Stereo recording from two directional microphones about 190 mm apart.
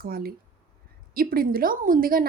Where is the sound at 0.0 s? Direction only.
50° right (ahead or behind).